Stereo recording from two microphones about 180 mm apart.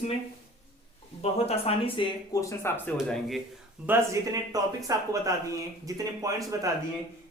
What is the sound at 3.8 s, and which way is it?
Speech, 15° right (ahead or behind).